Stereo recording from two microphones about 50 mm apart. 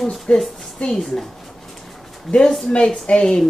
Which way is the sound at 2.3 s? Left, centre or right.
Centre.